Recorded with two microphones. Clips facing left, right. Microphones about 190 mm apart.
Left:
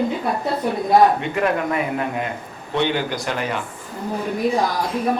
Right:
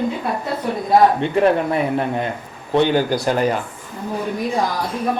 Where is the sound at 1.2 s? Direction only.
30° right (ahead or behind).